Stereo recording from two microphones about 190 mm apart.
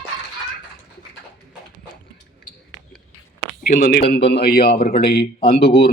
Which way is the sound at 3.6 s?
45° left (ahead or behind).